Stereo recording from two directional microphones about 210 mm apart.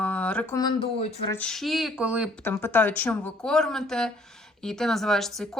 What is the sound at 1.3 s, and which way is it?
Speech, 5° left (ahead or behind).